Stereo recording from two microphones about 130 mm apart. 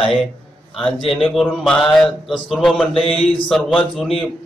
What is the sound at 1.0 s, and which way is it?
A man's voice, centre (ahead or behind).